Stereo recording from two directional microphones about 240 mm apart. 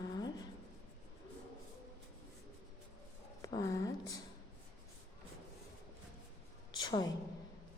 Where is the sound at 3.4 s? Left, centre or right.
Centre.